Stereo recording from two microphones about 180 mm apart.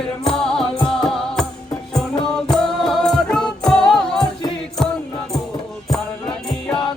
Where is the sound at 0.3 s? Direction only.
5° left (ahead or behind).